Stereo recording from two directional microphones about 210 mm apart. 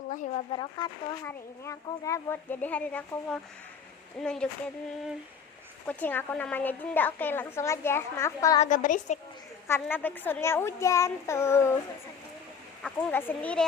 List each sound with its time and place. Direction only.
0.1 s speech: 40° left (ahead or behind)
0.5 s a woman's voice: 20° left (ahead or behind)
4.2 s a sound: 5° left (ahead or behind)
5.8 s a woman's voice: 5° left (ahead or behind)
8.5 s a woman's voice: 35° left (ahead or behind)
9.6 s a woman's voice: 10° left (ahead or behind)
12.8 s a woman's voice: 5° left (ahead or behind)